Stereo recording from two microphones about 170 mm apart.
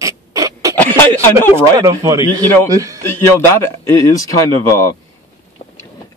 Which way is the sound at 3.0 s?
15° left (ahead or behind).